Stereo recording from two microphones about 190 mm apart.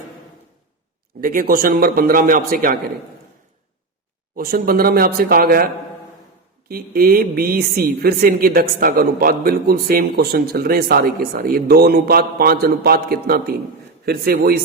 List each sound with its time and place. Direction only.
1.2 s speech: 45° right (ahead or behind)
4.4 s speech: 50° right (ahead or behind)